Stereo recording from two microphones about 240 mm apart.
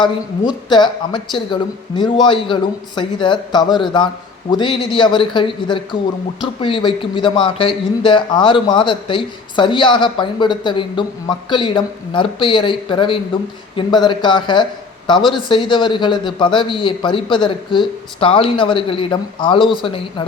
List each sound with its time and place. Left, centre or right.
0.0 s a man's voice: centre